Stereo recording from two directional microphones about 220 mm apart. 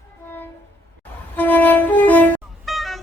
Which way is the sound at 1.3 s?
10° left (ahead or behind).